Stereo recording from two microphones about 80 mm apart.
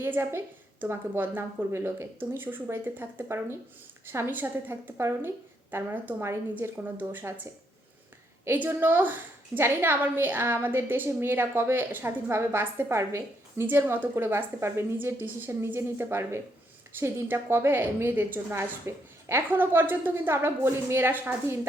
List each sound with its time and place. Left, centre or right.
0.0 s a woman's voice: right
8.4 s a woman's voice: right